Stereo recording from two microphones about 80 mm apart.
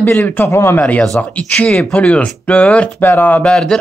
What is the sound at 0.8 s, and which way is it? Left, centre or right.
Speech, centre.